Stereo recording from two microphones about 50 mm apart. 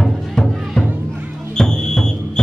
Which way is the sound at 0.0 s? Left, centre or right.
Centre.